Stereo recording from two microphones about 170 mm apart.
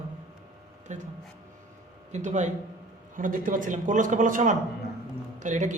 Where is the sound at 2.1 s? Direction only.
45° right (ahead or behind).